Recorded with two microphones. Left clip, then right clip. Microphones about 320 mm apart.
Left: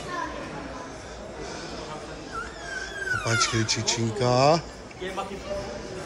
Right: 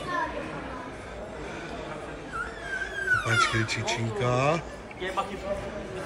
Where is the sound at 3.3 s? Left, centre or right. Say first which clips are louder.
Even; centre.